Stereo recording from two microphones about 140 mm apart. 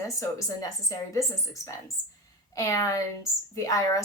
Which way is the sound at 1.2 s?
20° left (ahead or behind).